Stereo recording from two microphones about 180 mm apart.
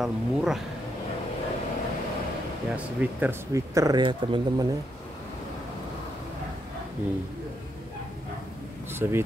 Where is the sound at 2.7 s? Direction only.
10° right (ahead or behind); by 4.7 s 25° right (ahead or behind).